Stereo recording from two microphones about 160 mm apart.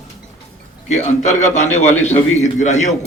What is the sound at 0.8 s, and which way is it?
A man's voice, 45° left (ahead or behind).